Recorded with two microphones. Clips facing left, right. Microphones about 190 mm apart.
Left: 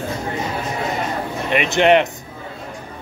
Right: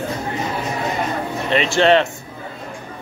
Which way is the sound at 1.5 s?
15° left (ahead or behind).